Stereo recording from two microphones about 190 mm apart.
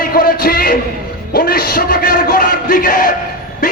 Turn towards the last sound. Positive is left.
turn(degrees=45)  # may be behind; listen again after turning